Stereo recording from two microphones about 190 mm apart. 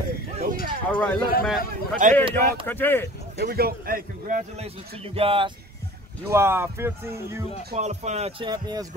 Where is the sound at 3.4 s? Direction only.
55° right (ahead or behind).